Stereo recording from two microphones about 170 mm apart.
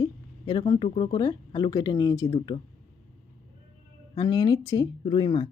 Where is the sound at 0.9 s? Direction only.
30° left (ahead or behind).